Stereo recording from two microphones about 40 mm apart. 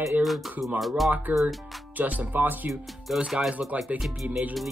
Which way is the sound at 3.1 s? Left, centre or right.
Centre.